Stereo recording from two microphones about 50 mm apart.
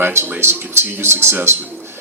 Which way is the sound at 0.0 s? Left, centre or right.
Right.